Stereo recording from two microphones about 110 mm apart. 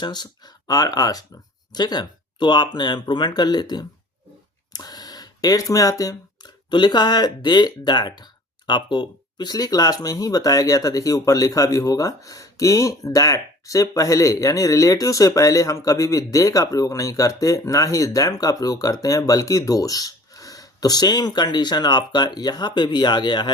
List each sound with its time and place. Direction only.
0.0 s speech: 40° left (ahead or behind)